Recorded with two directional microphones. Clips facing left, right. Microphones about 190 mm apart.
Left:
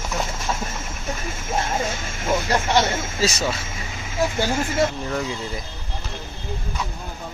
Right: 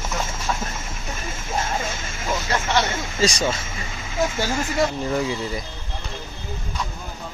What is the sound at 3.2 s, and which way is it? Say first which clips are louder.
Speech: right 2 dB; 5° left (ahead or behind).